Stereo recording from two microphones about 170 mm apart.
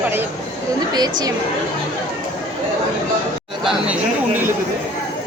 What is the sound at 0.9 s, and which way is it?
Speech, 25° right (ahead or behind).